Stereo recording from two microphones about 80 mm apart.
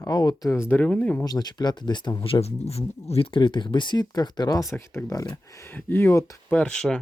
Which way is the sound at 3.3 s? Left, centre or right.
Left.